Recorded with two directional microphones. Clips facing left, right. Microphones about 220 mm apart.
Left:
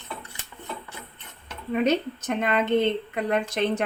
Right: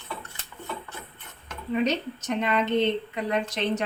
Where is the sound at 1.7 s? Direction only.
55° left (ahead or behind).